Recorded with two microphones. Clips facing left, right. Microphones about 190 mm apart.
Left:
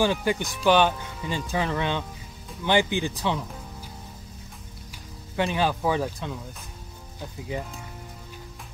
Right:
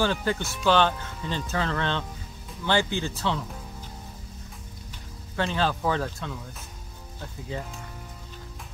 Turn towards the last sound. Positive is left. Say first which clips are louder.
# left 2 dB
turn(degrees=15)  # may be behind; listen again after turning